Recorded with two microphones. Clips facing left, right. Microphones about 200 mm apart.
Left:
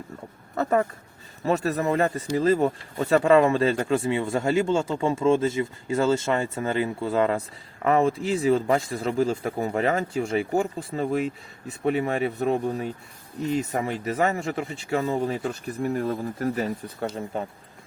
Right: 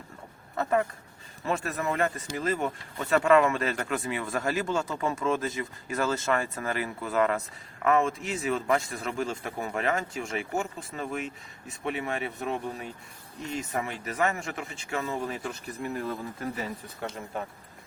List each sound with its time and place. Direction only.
0.5 s speech: 40° left (ahead or behind)